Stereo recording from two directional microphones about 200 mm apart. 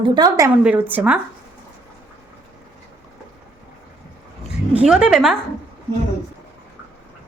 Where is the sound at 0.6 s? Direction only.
10° right (ahead or behind).